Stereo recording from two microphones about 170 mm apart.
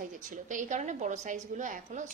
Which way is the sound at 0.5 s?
45° right (ahead or behind).